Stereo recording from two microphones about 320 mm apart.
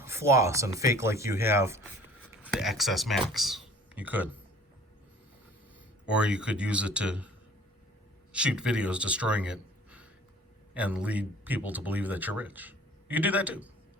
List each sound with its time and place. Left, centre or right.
0.0 s speech: centre
6.1 s speech: centre